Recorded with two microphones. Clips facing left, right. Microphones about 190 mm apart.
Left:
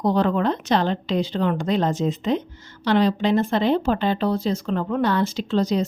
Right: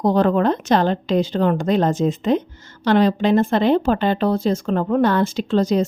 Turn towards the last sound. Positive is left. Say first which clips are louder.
# right 3 dB
turn(degrees=-50)  # may be behind; listen again after turning